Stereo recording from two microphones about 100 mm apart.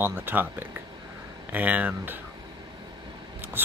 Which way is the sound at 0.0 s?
20° right (ahead or behind).